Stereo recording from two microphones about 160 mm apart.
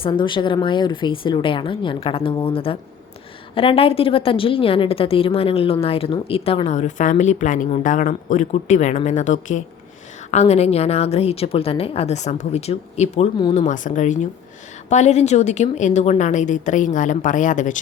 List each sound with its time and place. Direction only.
0.0 s a woman's voice: 30° left (ahead or behind); by 17.7 s 50° left (ahead or behind)